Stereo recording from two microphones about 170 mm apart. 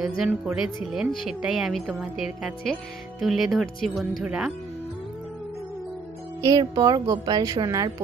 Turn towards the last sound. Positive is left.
turn(degrees=-20)  # may be behind; listen again after turning